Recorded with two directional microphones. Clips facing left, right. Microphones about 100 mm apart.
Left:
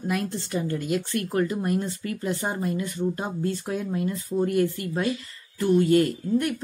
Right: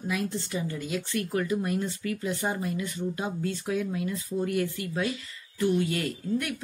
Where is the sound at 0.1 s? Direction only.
55° left (ahead or behind).